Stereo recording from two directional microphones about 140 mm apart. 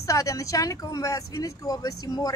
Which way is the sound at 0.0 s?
25° left (ahead or behind).